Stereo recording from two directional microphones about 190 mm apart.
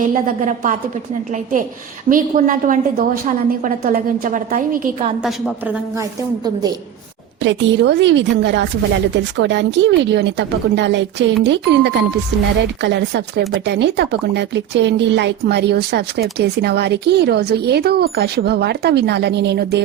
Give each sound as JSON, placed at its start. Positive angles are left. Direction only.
{"t": 0.0, "sound": "a woman's voice", "side_deg": -45}
{"t": 2.0, "sound": "a woman's voice", "side_deg": -45}
{"t": 5.2, "sound": "a woman's voice", "side_deg": -5}
{"t": 6.0, "sound": "a woman's voice", "side_deg": -20}
{"t": 7.4, "sound": "a woman's voice", "side_deg": -70}